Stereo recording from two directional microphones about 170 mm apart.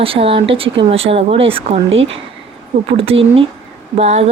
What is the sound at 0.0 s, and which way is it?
A woman's voice, 35° right (ahead or behind).